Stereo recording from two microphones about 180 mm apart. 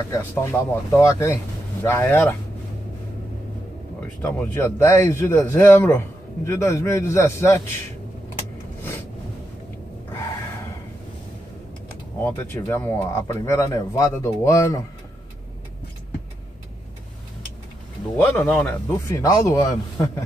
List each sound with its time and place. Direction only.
0.1 s a man's voice: 15° left (ahead or behind)
4.2 s a man's voice: 15° left (ahead or behind)
12.2 s a man's voice: 15° left (ahead or behind)
18.1 s speech: 5° left (ahead or behind)
19.0 s a man's voice: 15° left (ahead or behind)